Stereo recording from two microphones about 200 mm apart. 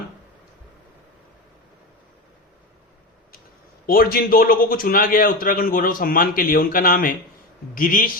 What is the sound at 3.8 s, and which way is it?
A man's voice, 50° left (ahead or behind).